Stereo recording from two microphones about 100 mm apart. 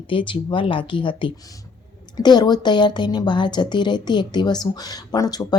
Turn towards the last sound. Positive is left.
turn(degrees=40)  # may be behind; listen again after turning